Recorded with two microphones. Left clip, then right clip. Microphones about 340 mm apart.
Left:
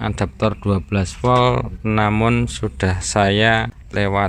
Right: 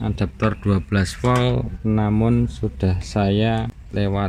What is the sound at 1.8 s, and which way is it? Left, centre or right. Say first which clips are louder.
Speech: left 5 dB; left.